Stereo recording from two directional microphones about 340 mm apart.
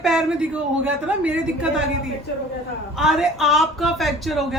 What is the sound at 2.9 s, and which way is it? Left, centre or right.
Speech, centre.